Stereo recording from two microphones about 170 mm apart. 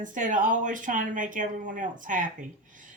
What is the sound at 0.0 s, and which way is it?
A woman's voice, 50° right (ahead or behind).